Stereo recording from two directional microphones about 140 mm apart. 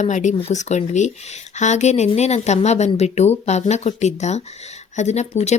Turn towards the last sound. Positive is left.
turn(degrees=50)  # may be behind; listen again after turning